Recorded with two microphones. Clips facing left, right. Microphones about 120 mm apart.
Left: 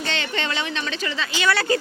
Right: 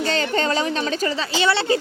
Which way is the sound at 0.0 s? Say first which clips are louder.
Right 6 dB; 40° right (ahead or behind).